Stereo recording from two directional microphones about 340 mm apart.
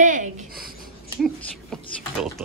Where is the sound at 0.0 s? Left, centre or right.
Right.